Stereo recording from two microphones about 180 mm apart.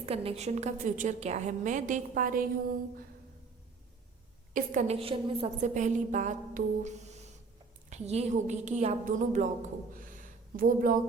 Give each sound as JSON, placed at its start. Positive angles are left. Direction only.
{"t": 0.0, "sound": "a woman's voice", "side_deg": -35}
{"t": 4.5, "sound": "a woman's voice", "side_deg": -45}
{"t": 9.9, "sound": "a sound", "side_deg": -50}